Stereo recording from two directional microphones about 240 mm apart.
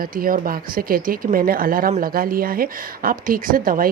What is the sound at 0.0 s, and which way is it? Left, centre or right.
Speech, right.